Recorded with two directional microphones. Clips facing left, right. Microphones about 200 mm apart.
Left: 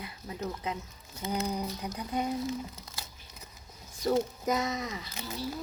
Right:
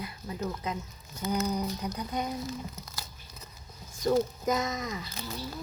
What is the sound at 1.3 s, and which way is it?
Speech, 30° left (ahead or behind).